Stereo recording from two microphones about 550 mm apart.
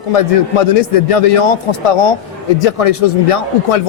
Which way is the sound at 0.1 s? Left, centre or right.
Left.